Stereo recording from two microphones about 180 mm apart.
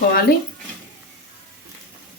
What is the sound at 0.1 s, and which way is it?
Speech, 55° left (ahead or behind).